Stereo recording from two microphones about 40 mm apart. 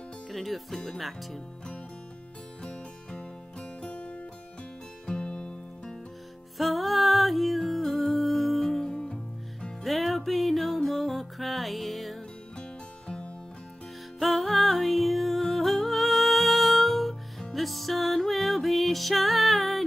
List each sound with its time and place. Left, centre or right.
0.3 s speech: centre
2.6 s music: left
6.6 s music: centre
8.8 s music: centre
9.8 s music: centre
12.5 s music: centre
14.2 s music: centre